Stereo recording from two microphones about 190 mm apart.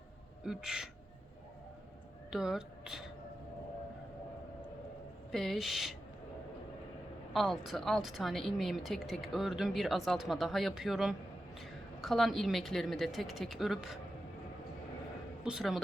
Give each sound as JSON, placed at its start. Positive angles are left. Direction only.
{"t": 0.4, "sound": "a woman's voice", "side_deg": -5}
{"t": 2.3, "sound": "speech", "side_deg": -5}
{"t": 5.3, "sound": "a woman's voice", "side_deg": 0}
{"t": 7.3, "sound": "a woman's voice", "side_deg": 0}
{"t": 15.4, "sound": "a woman's voice", "side_deg": 0}